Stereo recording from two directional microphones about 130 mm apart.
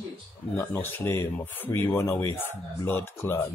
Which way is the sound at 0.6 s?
15° left (ahead or behind).